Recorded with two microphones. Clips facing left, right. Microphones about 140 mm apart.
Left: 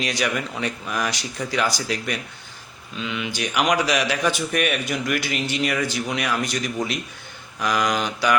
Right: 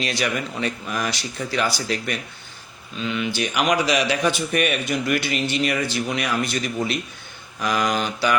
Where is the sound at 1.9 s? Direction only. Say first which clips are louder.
Right 1 dB; 5° left (ahead or behind).